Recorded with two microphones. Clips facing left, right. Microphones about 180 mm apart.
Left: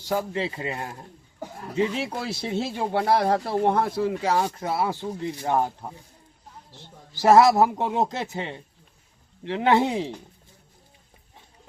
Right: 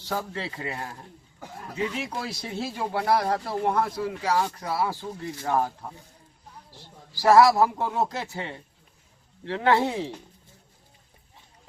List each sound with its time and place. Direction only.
0.0 s speech: 15° left (ahead or behind)